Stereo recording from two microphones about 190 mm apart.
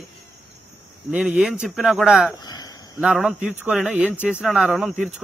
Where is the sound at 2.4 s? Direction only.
20° left (ahead or behind).